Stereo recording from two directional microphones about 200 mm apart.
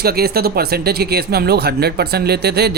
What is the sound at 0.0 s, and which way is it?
Speech, 50° right (ahead or behind).